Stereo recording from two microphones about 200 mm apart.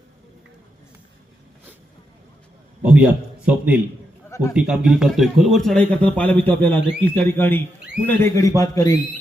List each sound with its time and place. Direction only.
2.8 s a man's voice: 5° right (ahead or behind)
4.3 s a sound: 15° left (ahead or behind)
4.5 s a man's voice: 5° right (ahead or behind); by 9.0 s 15° left (ahead or behind)